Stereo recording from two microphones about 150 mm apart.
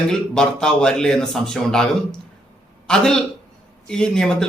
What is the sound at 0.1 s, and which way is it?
A man's voice, 5° left (ahead or behind).